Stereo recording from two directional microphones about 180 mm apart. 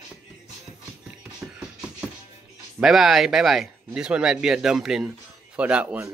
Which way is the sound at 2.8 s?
Centre (ahead or behind).